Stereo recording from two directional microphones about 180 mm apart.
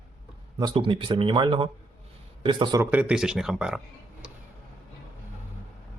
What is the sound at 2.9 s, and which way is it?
Speech, 5° right (ahead or behind).